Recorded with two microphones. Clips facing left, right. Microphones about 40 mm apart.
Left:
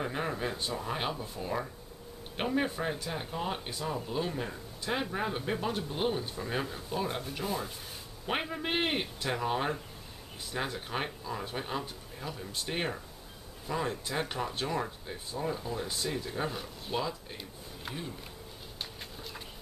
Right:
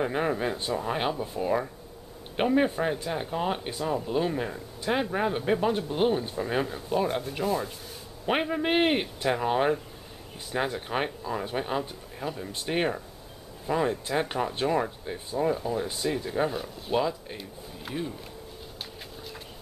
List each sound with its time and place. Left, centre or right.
0.0 s speech: centre
8.3 s speech: centre
17.9 s speech: centre